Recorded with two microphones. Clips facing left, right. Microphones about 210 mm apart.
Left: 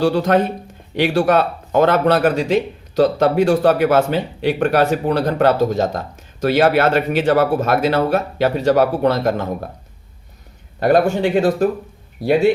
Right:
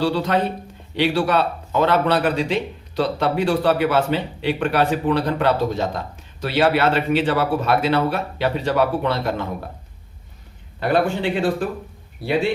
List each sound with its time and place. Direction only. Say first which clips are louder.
0.0 s speech: left 5 dB; 50° left (ahead or behind)
10.8 s speech: left 5 dB; 45° left (ahead or behind)